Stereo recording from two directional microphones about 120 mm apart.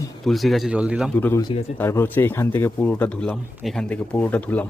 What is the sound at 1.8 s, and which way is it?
Speech, 20° left (ahead or behind).